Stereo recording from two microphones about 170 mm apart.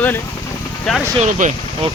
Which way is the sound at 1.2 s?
50° right (ahead or behind).